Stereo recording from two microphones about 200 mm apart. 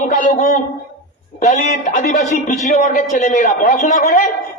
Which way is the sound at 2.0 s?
40° left (ahead or behind).